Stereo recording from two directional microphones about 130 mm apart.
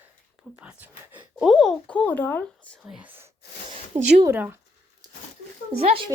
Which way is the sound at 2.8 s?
10° right (ahead or behind).